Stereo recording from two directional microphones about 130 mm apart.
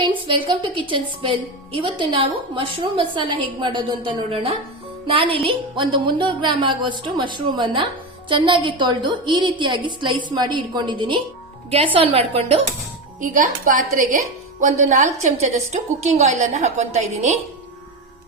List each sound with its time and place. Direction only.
0.3 s a woman's voice: 40° right (ahead or behind)
11.9 s a woman's voice: 50° right (ahead or behind)
13.1 s a woman's voice: 85° right
14.6 s a woman's voice: 75° right (ahead or behind); by 17.3 s 55° right (ahead or behind)